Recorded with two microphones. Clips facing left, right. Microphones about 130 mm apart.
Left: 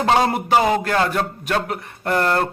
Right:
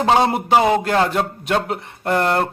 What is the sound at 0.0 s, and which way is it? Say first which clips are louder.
A man's voice: right 2 dB; 20° right (ahead or behind).